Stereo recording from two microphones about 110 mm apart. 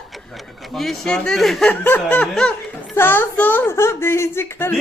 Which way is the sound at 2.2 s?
5° left (ahead or behind).